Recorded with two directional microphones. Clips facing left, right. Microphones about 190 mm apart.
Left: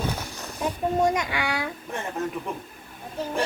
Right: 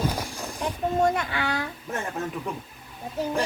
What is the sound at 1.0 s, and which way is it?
Speech, 10° left (ahead or behind).